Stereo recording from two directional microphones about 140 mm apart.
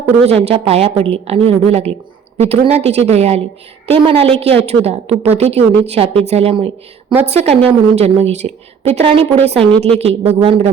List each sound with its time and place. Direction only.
0.3 s a woman's voice: 45° right (ahead or behind)